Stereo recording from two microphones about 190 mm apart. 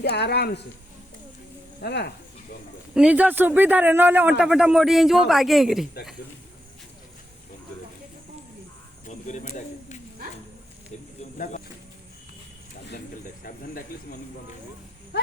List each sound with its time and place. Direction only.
0.0 s speech: 60° left (ahead or behind)
1.8 s speech: 60° left (ahead or behind)
2.9 s a woman's voice: 5° right (ahead or behind)
9.0 s speech: 40° left (ahead or behind)
11.2 s a sound: 40° left (ahead or behind)
13.4 s speech: 50° left (ahead or behind)
15.1 s a sound: 60° left (ahead or behind)